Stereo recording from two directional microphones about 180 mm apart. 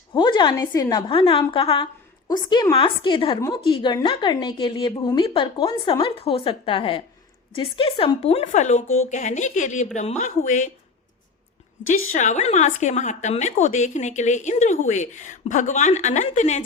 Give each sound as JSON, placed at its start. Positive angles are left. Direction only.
{"t": 0.1, "sound": "a woman's voice", "side_deg": 25}
{"t": 11.9, "sound": "a woman's voice", "side_deg": 45}